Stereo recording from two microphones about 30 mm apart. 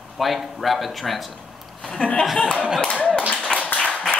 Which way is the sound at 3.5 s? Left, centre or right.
Left.